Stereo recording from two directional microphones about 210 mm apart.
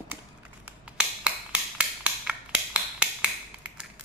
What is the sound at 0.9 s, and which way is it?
Finger snapping, 5° right (ahead or behind).